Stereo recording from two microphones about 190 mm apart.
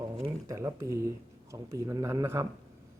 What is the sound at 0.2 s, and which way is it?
Speech, 20° right (ahead or behind).